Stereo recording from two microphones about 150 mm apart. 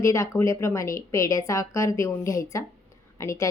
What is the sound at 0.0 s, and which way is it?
A woman's voice, 20° left (ahead or behind).